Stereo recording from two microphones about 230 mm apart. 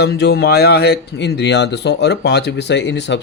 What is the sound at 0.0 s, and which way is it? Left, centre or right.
Speech, left.